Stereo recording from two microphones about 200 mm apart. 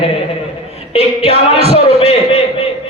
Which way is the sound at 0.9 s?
30° right (ahead or behind).